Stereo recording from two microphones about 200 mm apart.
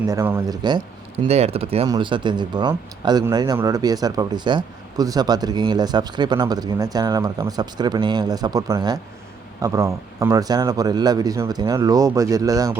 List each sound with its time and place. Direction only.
0.0 s speech: 15° right (ahead or behind)